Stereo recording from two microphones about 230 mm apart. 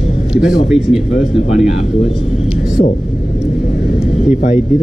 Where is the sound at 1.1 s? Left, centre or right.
Left.